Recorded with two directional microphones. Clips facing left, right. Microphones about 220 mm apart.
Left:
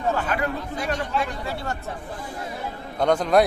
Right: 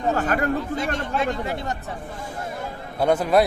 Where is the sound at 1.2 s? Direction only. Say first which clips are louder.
Right 4 dB; 20° right (ahead or behind).